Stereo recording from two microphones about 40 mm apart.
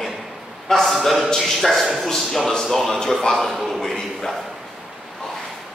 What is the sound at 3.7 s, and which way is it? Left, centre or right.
Speech, centre.